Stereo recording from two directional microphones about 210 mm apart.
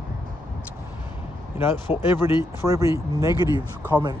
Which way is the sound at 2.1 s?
15° right (ahead or behind).